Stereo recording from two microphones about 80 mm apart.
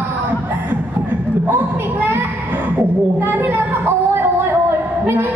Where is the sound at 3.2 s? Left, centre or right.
Right.